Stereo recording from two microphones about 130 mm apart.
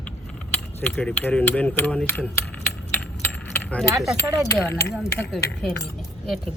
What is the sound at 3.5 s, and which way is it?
Keys jangling, 10° left (ahead or behind).